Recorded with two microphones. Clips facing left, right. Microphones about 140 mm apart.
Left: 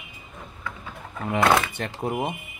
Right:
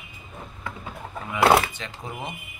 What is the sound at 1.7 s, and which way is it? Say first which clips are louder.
Speech: left 8 dB; 60° left (ahead or behind).